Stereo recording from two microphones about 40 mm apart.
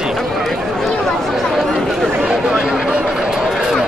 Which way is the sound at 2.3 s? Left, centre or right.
Centre.